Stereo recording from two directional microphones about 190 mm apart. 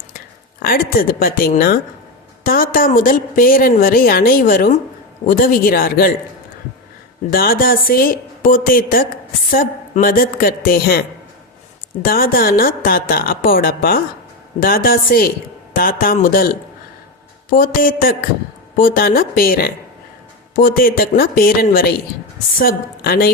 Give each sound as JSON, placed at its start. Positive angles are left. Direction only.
{"t": 0.6, "sound": "a woman's voice", "side_deg": 50}
{"t": 7.3, "sound": "a woman's voice", "side_deg": 50}
{"t": 12.0, "sound": "a woman's voice", "side_deg": 50}
{"t": 17.6, "sound": "a woman's voice", "side_deg": 50}